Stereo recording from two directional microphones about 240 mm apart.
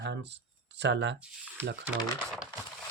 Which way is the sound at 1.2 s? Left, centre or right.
Centre.